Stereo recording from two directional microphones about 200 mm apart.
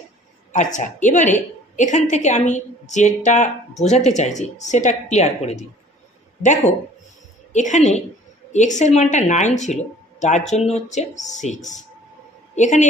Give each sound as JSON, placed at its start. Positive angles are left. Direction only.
{"t": 0.5, "sound": "a woman's voice", "side_deg": 40}
{"t": 7.5, "sound": "a woman's voice", "side_deg": 35}